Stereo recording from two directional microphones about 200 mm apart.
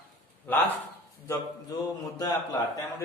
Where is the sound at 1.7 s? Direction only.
20° left (ahead or behind).